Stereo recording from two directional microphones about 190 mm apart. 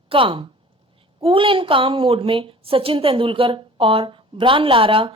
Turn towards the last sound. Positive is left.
turn(degrees=-25)  # may be behind; listen again after turning